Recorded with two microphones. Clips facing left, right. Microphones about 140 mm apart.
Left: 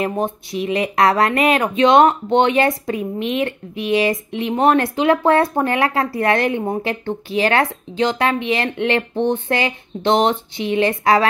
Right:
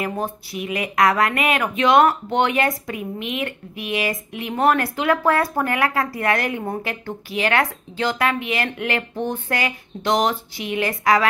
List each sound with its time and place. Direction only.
0.0 s speech: 20° left (ahead or behind)